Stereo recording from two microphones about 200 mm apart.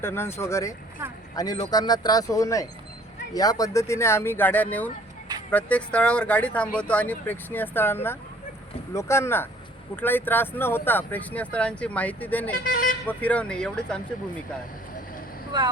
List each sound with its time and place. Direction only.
0.0 s speech: 10° left (ahead or behind)
12.6 s vehicle: 45° left (ahead or behind)
13.1 s speech: 5° left (ahead or behind)